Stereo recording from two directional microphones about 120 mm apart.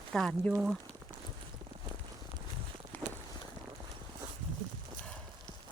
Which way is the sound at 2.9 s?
15° left (ahead or behind).